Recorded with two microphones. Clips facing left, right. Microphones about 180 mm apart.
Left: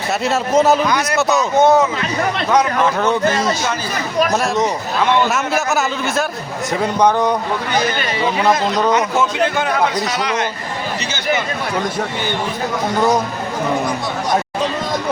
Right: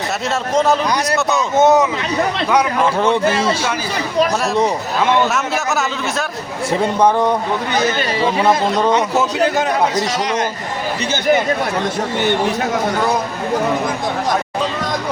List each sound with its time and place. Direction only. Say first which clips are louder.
0.5 s a man's voice: left 2 dB; 5° left (ahead or behind)
1.5 s speech: right 1 dB; 20° right (ahead or behind)
4.2 s a man's voice: right 1 dB; 30° right (ahead or behind)
5.3 s a man's voice: left 1 dB; centre (ahead or behind)
7.9 s speech: right 2 dB; 30° right (ahead or behind)
8.4 s a man's voice: even; 5° right (ahead or behind)
9.4 s a man's voice: right 1 dB; 40° right (ahead or behind)